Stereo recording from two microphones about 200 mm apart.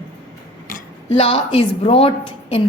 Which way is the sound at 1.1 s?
30° left (ahead or behind).